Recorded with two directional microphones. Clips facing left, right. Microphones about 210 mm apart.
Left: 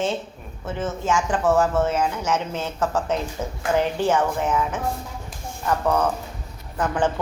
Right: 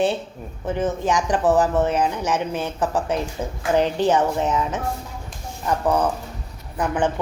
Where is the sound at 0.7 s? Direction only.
15° right (ahead or behind).